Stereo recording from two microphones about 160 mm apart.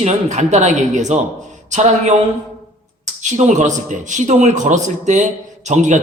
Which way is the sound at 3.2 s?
50° right (ahead or behind).